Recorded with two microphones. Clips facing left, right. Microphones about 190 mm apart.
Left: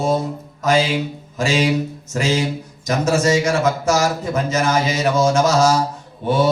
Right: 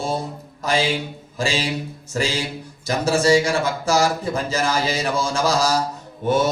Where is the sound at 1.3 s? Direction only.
30° right (ahead or behind).